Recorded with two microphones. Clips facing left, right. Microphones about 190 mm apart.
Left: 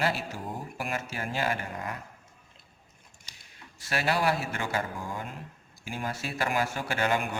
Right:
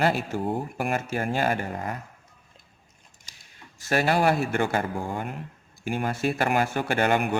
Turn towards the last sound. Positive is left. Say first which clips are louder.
# right 5 dB
turn(degrees=-60)  # may be behind; listen again after turning